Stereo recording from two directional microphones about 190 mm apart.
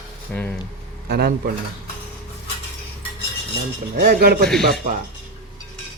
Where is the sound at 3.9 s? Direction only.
50° right (ahead or behind).